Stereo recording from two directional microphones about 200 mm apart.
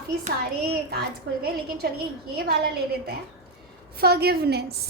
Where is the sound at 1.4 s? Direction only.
50° right (ahead or behind).